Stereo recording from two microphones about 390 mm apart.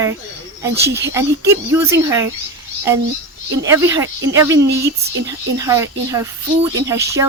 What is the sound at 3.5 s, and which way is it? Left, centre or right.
A woman's voice, centre.